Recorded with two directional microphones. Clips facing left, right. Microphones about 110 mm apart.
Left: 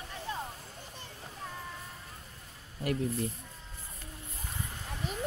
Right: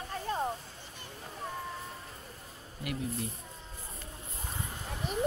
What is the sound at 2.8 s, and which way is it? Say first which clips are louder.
Speech: left 5 dB; 40° left (ahead or behind).